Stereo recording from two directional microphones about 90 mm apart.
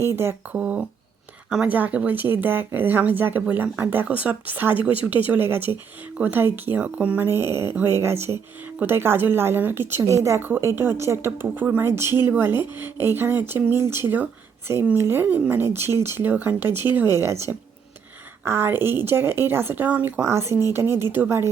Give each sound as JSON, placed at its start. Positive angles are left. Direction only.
{"t": 0.0, "sound": "a woman's voice", "side_deg": -30}
{"t": 0.5, "sound": "a woman's voice", "side_deg": -15}